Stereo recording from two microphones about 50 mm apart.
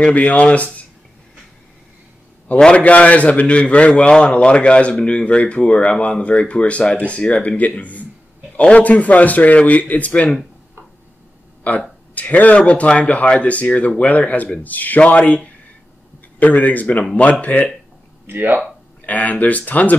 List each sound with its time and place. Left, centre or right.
0.0 s a man's voice: left
2.6 s a man's voice: left
11.7 s a man's voice: left
18.2 s speech: right
18.6 s speech: left